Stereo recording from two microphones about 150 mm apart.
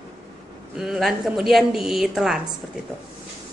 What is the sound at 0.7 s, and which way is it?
A woman's voice, centre (ahead or behind).